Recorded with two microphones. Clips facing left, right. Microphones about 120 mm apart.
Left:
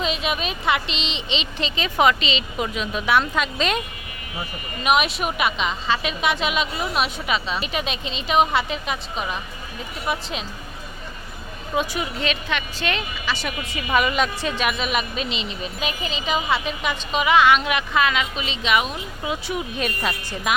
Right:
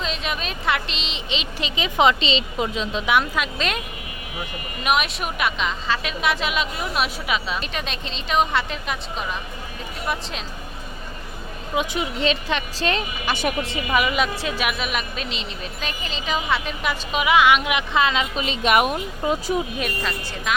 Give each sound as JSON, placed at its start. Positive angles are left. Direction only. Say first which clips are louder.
{"t": 0.0, "sound": "a woman's voice", "louder": "left 3 dB", "side_deg": 5}
{"t": 3.1, "sound": "a woman's voice", "louder": "left 1 dB", "side_deg": -10}
{"t": 4.8, "sound": "a woman's voice", "louder": "left 2 dB", "side_deg": 0}
{"t": 7.6, "sound": "a woman's voice", "louder": "left 3 dB", "side_deg": 5}
{"t": 11.7, "sound": "a woman's voice", "louder": "even", "side_deg": -15}
{"t": 12.2, "sound": "speech", "louder": "right 5 dB", "side_deg": -30}
{"t": 13.2, "sound": "a woman's voice", "louder": "right 4 dB", "side_deg": -55}
{"t": 13.6, "sound": "speech", "louder": "right 5 dB", "side_deg": -30}
{"t": 13.9, "sound": "a woman's voice", "louder": "left 1 dB", "side_deg": -5}
{"t": 18.4, "sound": "a woman's voice", "louder": "right 5 dB", "side_deg": -50}
{"t": 19.2, "sound": "speech", "louder": "right 4 dB", "side_deg": -40}
{"t": 20.0, "sound": "speech", "louder": "left 1 dB", "side_deg": 10}